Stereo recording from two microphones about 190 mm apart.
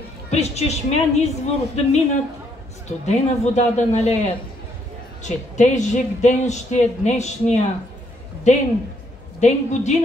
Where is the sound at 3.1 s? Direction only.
35° left (ahead or behind).